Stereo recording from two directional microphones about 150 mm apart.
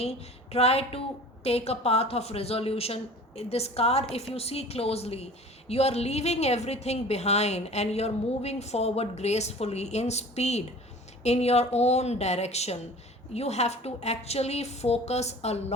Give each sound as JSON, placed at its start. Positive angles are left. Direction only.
{"t": 0.0, "sound": "a woman's voice", "side_deg": 45}